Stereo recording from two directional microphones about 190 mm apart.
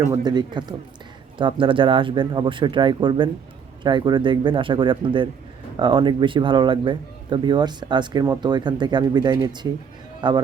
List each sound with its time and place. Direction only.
0.3 s a man's voice: 20° right (ahead or behind)